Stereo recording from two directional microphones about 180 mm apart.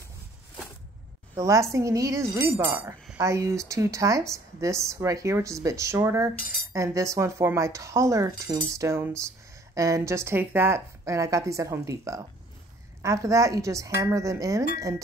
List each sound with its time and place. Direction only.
1.3 s speech: 15° right (ahead or behind)